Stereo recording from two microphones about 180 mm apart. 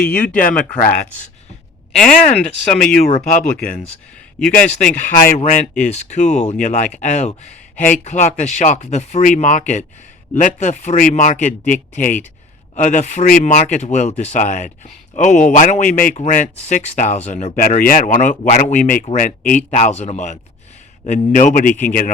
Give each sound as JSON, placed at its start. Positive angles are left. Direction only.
{"t": 0.0, "sound": "speech", "side_deg": 55}
{"t": 2.8, "sound": "speech", "side_deg": 5}
{"t": 4.4, "sound": "speech", "side_deg": 5}
{"t": 4.9, "sound": "speech", "side_deg": 50}